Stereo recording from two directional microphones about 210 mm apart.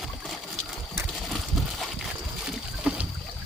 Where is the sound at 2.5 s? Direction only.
5° right (ahead or behind).